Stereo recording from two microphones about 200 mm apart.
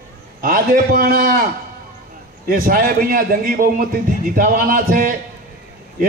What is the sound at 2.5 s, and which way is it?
A man's voice, 45° right (ahead or behind).